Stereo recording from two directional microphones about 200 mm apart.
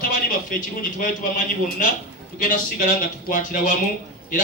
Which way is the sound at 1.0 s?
45° left (ahead or behind).